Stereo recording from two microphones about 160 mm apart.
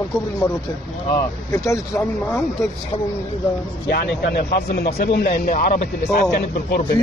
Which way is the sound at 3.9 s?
90° left.